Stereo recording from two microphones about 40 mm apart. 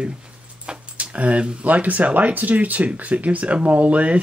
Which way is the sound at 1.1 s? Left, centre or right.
Right.